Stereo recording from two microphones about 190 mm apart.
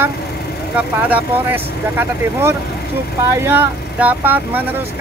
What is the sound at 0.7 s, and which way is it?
Speech, 10° right (ahead or behind).